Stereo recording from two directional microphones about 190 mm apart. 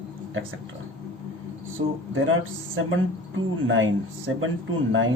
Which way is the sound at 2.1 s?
90° right.